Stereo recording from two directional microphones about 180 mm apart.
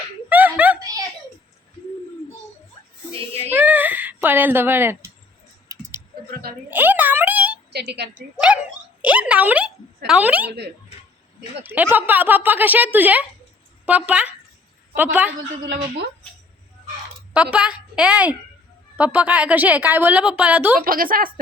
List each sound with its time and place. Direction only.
0.3 s a sound: 10° right (ahead or behind)
3.5 s a sound: 10° right (ahead or behind)
7.7 s a woman's voice: 65° right (ahead or behind)
9.0 s a woman's voice: 5° right (ahead or behind)
11.6 s a woman's voice: 10° right (ahead or behind)
17.3 s a woman's voice: 5° right (ahead or behind)
20.7 s a woman's voice: 50° right (ahead or behind)